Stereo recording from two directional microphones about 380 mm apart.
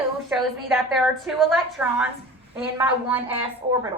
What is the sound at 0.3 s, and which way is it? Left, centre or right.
A woman's voice, centre.